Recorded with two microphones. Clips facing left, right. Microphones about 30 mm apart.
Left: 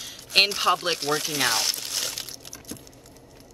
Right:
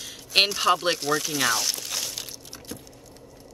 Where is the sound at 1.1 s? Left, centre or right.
Left.